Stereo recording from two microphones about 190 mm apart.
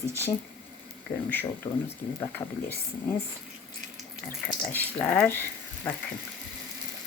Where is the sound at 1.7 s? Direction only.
30° left (ahead or behind).